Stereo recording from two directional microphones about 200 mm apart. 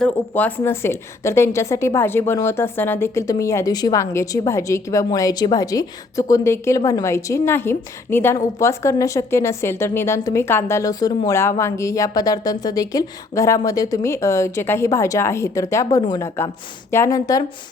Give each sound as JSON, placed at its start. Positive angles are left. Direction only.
{"t": 0.0, "sound": "a woman's voice", "side_deg": 10}